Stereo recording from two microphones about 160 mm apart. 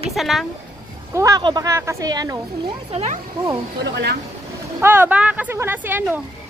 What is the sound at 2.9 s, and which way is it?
Speech, 40° right (ahead or behind).